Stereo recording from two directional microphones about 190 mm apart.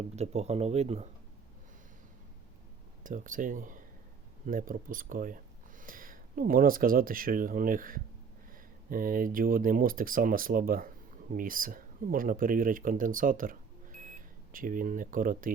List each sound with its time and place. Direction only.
0.2 s speech: 35° right (ahead or behind)
3.0 s speech: 45° right (ahead or behind)